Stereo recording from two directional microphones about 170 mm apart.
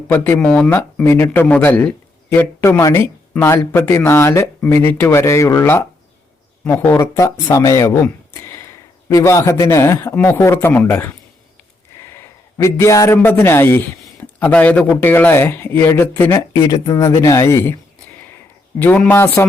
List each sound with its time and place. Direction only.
0.1 s speech: 10° left (ahead or behind)
11.9 s a sound: 15° left (ahead or behind)
12.6 s speech: 15° left (ahead or behind)